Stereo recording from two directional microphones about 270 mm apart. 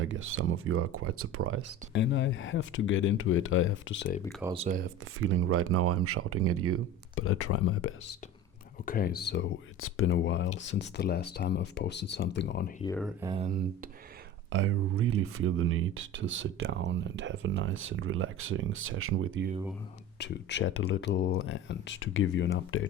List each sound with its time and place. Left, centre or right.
0.0 s speech: right
1.9 s speech: left
4.4 s speech: right
5.2 s speech: right
7.2 s speech: left
8.9 s speech: left
13.2 s speech: centre
14.5 s speech: right
20.1 s speech: left